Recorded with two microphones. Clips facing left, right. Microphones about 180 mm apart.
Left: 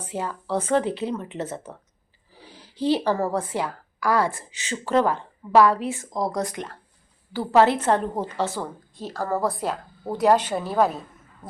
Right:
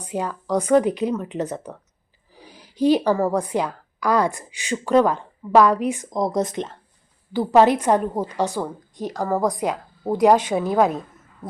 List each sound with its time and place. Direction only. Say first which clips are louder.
0.0 s a woman's voice: right 3 dB; 15° right (ahead or behind)